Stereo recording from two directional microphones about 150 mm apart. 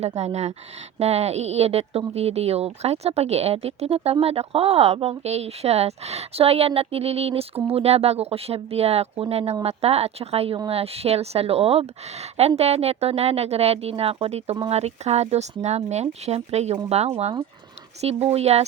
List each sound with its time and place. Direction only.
0.2 s speech: 45° right (ahead or behind)